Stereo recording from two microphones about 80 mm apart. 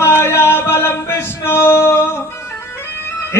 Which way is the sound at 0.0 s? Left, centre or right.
Left.